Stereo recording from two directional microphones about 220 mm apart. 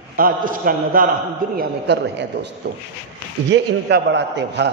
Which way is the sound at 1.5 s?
50° right (ahead or behind).